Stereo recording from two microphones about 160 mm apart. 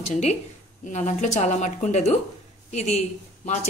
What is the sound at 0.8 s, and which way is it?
Speech, 50° left (ahead or behind).